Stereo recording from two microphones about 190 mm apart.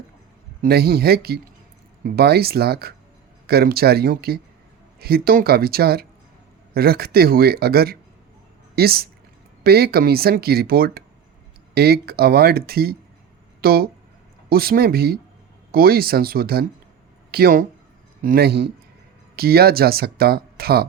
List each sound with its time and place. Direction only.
0.6 s speech: 55° right (ahead or behind)